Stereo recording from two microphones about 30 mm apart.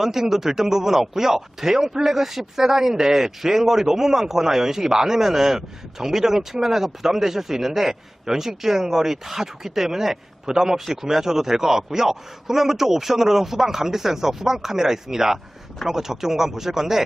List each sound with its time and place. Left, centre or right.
0.0 s a man's voice: centre